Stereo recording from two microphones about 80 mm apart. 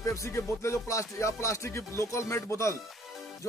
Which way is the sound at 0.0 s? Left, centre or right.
Left.